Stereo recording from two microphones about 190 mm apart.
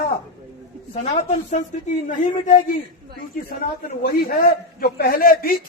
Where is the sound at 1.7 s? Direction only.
40° left (ahead or behind).